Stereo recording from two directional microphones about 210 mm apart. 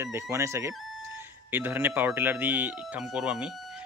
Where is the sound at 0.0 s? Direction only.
15° right (ahead or behind).